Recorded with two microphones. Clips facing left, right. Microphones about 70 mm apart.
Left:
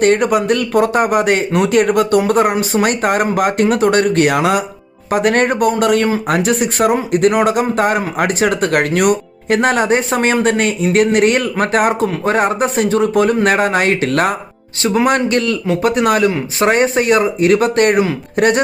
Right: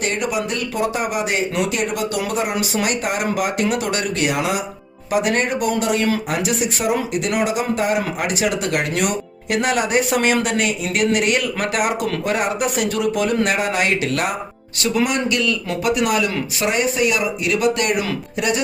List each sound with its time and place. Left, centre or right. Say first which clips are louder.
0.0 s speech: left 9 dB; left
14.8 s speech: left 6 dB; left